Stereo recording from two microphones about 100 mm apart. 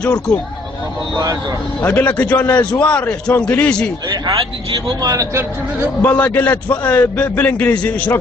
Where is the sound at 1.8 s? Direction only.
15° left (ahead or behind).